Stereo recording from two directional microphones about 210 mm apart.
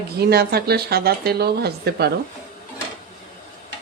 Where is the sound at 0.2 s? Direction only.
50° right (ahead or behind).